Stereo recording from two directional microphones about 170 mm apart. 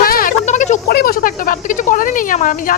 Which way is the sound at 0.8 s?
65° left (ahead or behind).